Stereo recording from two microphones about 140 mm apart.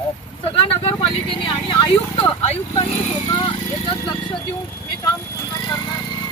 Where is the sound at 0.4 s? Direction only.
40° left (ahead or behind).